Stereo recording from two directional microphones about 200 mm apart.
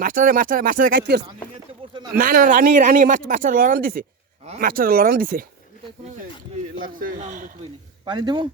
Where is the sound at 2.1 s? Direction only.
45° right (ahead or behind).